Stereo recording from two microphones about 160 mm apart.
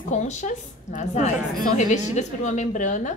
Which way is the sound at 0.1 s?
50° left (ahead or behind).